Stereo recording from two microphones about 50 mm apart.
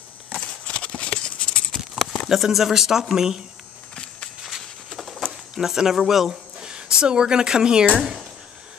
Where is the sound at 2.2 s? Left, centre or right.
Centre.